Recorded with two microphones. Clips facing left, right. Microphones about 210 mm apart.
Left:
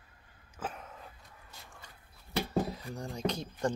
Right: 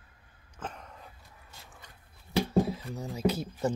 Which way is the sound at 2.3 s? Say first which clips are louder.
Right 5 dB; centre (ahead or behind).